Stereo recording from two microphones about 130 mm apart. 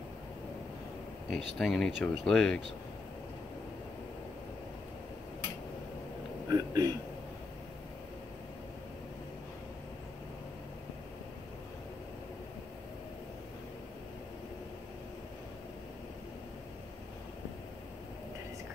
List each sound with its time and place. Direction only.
1.3 s speech: centre (ahead or behind)
6.5 s a man's voice: 30° right (ahead or behind)